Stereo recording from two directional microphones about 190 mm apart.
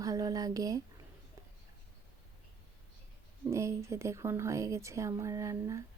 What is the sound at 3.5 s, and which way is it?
A woman's voice, 15° right (ahead or behind).